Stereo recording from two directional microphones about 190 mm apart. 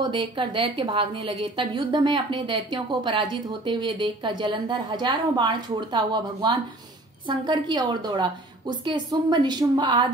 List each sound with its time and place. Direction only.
0.0 s a woman's voice: 25° right (ahead or behind)